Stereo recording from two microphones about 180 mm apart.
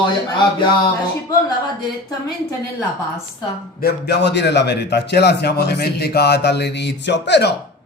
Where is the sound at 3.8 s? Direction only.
65° left (ahead or behind).